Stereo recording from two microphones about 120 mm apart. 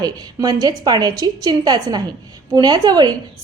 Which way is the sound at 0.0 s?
35° right (ahead or behind).